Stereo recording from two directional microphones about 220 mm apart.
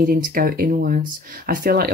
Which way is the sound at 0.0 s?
40° right (ahead or behind).